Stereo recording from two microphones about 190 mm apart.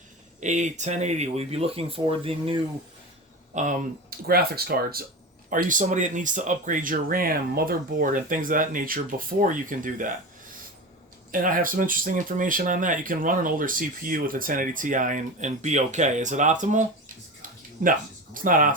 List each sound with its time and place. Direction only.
0.3 s speech: 40° right (ahead or behind)
3.5 s speech: 40° right (ahead or behind)
4.3 s speech: 55° right (ahead or behind)
11.3 s speech: 45° right (ahead or behind)